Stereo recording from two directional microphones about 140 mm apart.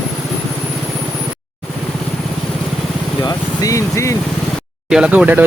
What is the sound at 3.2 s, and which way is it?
Vehicle, 25° left (ahead or behind).